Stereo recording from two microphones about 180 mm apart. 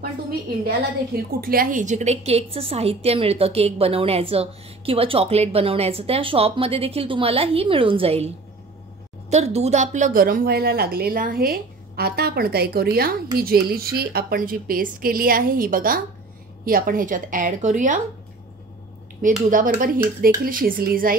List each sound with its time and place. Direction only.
0.7 s a woman's voice: 55° right (ahead or behind); by 8.3 s 30° right (ahead or behind)
9.3 s a woman's voice: 35° right (ahead or behind)
19.5 s a woman's voice: 50° right (ahead or behind)